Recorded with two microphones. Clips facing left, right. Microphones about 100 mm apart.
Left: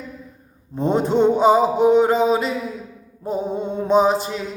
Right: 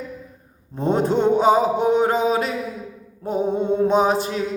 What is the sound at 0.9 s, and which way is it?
Mantra, 50° right (ahead or behind).